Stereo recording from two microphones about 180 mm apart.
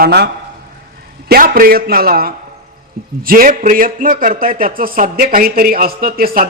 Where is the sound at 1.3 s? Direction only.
55° right (ahead or behind).